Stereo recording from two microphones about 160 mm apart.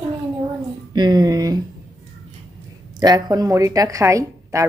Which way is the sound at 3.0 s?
25° right (ahead or behind).